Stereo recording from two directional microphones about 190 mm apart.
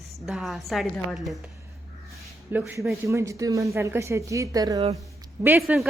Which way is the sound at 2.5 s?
10° right (ahead or behind).